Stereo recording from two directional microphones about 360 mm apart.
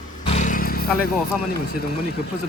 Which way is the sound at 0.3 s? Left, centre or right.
Left.